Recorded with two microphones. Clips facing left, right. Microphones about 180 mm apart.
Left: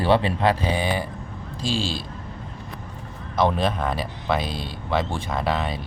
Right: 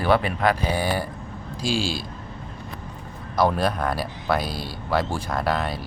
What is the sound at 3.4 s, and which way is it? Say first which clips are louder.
Speech: even; centre (ahead or behind).